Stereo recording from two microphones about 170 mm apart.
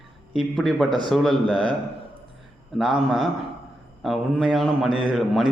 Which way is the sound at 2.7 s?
Centre (ahead or behind).